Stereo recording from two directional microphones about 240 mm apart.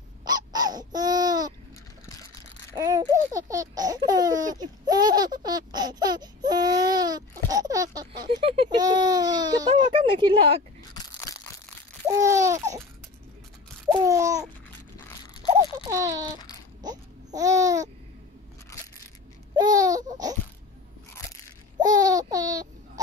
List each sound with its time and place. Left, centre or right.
0.2 s a sound: centre
2.7 s babbling: centre
11.1 s a sound: centre
12.2 s laughter: centre
13.9 s babbling: centre
15.5 s a sound: centre
16.8 s babbling: centre
18.7 s coin: centre
19.5 s baby cry: centre
21.7 s babbling: centre